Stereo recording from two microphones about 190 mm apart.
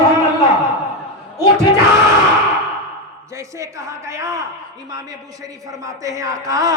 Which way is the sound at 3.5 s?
15° right (ahead or behind).